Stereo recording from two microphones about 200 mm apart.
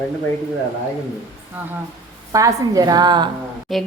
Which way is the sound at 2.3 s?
15° right (ahead or behind).